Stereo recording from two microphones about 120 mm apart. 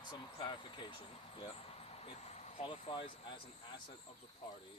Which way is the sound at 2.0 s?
60° left (ahead or behind).